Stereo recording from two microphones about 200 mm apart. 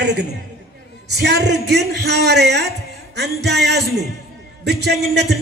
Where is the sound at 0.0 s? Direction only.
60° right (ahead or behind).